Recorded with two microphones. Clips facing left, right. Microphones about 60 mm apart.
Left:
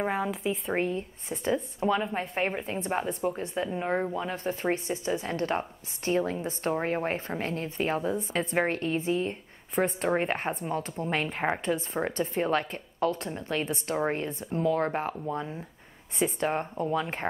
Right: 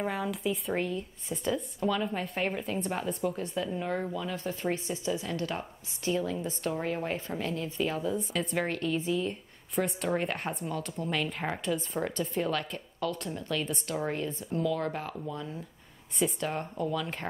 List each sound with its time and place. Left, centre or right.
0.0 s speech: left